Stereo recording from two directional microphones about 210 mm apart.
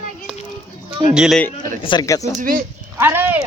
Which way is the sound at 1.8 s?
20° left (ahead or behind).